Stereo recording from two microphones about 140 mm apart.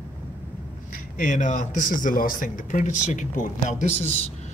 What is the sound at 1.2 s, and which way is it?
Speech, 65° left (ahead or behind).